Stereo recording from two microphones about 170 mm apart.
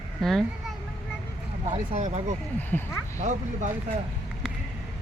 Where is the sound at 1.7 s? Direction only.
40° right (ahead or behind).